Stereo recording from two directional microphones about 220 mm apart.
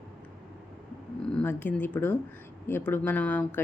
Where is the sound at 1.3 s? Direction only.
10° left (ahead or behind).